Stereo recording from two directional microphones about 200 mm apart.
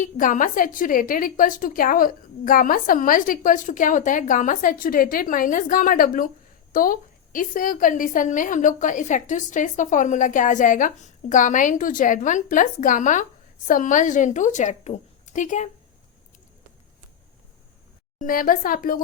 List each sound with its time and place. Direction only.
0.0 s a woman's voice: 40° left (ahead or behind)
18.2 s a woman's voice: 45° left (ahead or behind)